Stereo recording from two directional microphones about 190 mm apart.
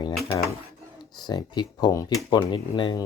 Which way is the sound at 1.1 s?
20° left (ahead or behind).